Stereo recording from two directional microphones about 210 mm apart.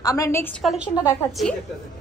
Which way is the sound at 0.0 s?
15° left (ahead or behind).